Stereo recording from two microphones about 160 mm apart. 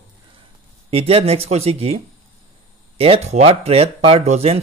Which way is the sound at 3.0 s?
40° right (ahead or behind).